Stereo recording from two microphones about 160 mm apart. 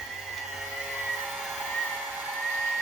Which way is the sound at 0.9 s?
5° right (ahead or behind).